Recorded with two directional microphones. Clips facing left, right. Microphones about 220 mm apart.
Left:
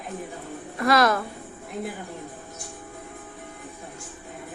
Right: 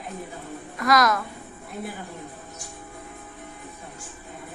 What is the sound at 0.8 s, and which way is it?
Speech, 30° left (ahead or behind).